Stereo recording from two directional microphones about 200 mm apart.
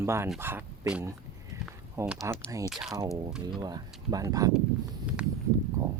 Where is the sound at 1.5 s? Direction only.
15° right (ahead or behind).